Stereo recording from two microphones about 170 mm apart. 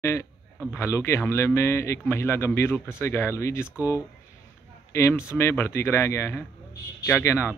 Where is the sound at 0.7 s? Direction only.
15° left (ahead or behind).